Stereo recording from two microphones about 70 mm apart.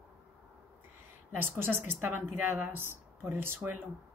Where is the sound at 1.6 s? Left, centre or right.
Right.